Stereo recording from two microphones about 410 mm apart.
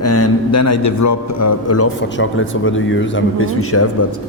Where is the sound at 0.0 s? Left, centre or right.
Left.